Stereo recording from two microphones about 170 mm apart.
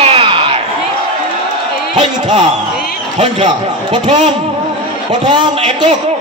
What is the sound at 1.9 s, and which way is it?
A man's voice, 25° right (ahead or behind).